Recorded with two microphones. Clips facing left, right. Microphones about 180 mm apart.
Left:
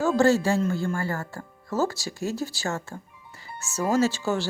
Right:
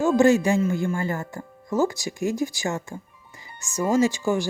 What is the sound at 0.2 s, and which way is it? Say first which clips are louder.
Speech: right 2 dB; 15° right (ahead or behind).